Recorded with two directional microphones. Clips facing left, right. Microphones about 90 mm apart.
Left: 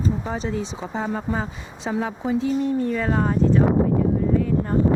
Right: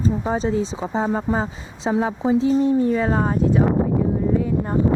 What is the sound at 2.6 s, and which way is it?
Speech, 20° right (ahead or behind).